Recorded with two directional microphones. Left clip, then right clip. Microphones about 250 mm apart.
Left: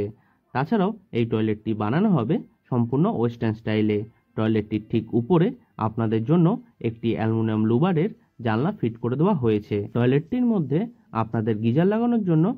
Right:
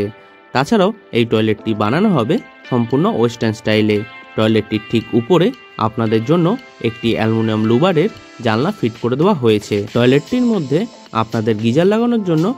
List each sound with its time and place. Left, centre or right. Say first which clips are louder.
0.0 s speech: right 8 dB; right